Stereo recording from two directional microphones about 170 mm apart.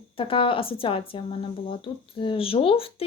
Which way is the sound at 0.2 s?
30° left (ahead or behind).